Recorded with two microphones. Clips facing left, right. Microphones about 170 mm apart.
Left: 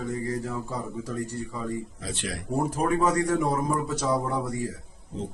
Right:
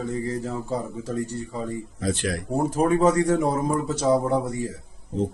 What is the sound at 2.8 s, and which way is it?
A man's voice, 25° right (ahead or behind).